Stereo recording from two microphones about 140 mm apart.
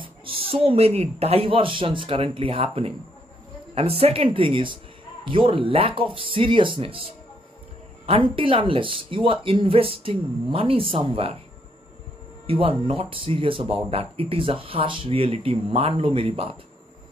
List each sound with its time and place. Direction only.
0.0 s speech: 40° right (ahead or behind)
4.0 s speech: 40° right (ahead or behind)
8.1 s speech: 40° right (ahead or behind)
12.4 s speech: 40° right (ahead or behind)